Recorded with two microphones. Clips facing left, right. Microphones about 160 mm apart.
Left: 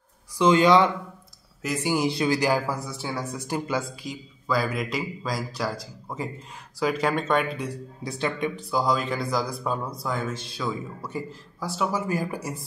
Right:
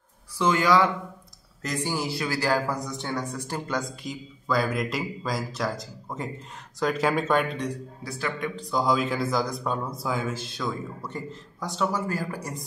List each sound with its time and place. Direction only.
0.4 s speech: 20° left (ahead or behind)
1.6 s a man's voice: 10° left (ahead or behind)
8.0 s speech: 20° left (ahead or behind)
8.6 s speech: centre (ahead or behind)